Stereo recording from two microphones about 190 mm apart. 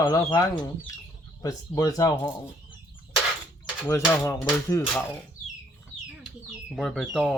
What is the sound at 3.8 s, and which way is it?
Speech, 15° left (ahead or behind).